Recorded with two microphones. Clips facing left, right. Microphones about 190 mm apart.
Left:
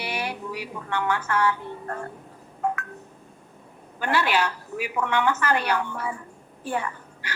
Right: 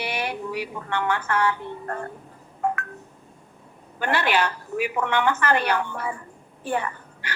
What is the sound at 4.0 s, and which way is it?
A woman's voice, 55° right (ahead or behind).